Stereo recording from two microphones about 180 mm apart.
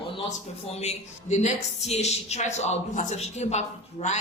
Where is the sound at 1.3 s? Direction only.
40° left (ahead or behind).